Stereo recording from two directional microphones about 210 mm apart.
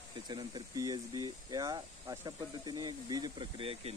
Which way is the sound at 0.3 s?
20° right (ahead or behind).